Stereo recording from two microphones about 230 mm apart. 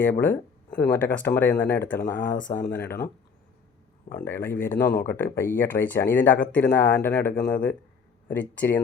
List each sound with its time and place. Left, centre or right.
0.0 s speech: centre
2.0 s speech: left
2.6 s speech: centre
4.1 s speech: centre